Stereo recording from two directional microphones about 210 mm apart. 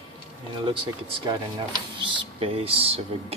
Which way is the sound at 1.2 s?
20° right (ahead or behind).